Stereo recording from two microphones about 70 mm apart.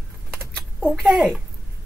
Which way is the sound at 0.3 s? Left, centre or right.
Centre.